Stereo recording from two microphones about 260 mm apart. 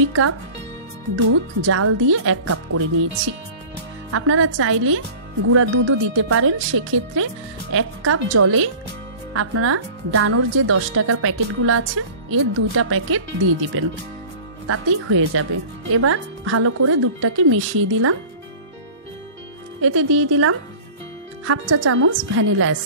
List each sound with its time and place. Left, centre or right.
0.0 s a woman's voice: right
1.6 s speech: right
4.1 s a woman's voice: right
19.8 s a woman's voice: right